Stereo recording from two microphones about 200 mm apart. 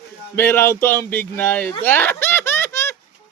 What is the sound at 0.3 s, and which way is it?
Speech, 10° left (ahead or behind).